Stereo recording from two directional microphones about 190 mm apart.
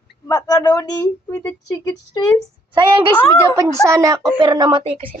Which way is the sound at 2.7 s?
25° right (ahead or behind).